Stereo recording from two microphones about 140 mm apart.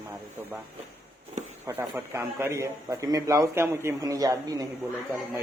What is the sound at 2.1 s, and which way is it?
A man's voice, 20° right (ahead or behind).